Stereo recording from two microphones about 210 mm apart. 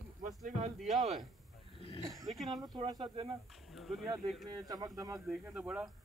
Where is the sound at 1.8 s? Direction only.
25° left (ahead or behind).